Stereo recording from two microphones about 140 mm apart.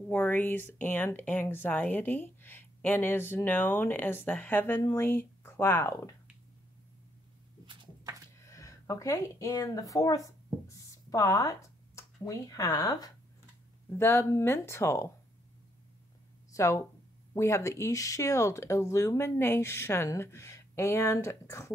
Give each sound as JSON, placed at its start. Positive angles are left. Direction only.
{"t": 0.1, "sound": "speech", "side_deg": 15}
{"t": 8.5, "sound": "speech", "side_deg": 20}
{"t": 13.9, "sound": "speech", "side_deg": 15}
{"t": 16.5, "sound": "speech", "side_deg": 20}